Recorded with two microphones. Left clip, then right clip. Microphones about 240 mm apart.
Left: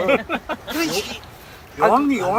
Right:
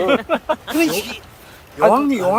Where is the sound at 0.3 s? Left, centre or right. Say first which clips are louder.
Right 6 dB; right.